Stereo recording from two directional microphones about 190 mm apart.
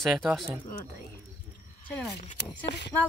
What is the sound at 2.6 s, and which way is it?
Speech, 65° left (ahead or behind).